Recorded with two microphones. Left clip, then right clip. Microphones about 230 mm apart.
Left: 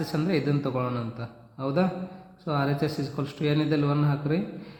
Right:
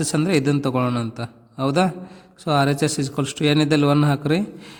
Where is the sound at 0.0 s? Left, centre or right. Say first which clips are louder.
Right 7 dB; right.